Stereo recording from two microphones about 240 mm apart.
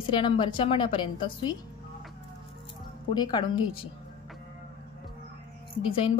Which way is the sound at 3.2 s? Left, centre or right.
Centre.